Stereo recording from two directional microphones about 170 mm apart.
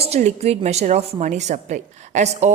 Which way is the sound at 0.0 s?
40° right (ahead or behind).